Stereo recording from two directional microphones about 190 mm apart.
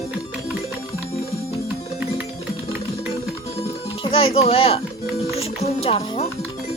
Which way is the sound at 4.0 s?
30° left (ahead or behind).